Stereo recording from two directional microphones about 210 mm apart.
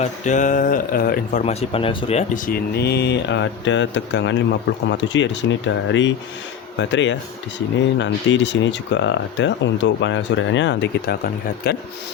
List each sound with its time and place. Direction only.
0.0 s speech: 35° left (ahead or behind)
2.5 s speech: 50° left (ahead or behind)
11.6 s speech: 45° left (ahead or behind)